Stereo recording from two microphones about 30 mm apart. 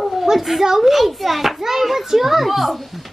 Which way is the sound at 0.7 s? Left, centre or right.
Centre.